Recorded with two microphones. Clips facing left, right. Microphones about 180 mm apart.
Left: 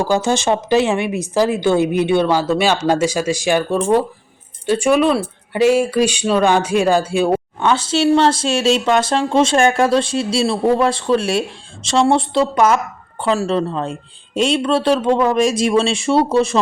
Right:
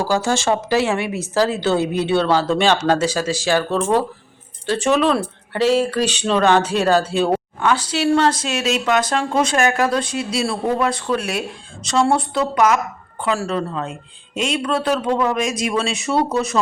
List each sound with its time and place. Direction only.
0.0 s speech: 20° left (ahead or behind)
7.6 s speech: 25° left (ahead or behind)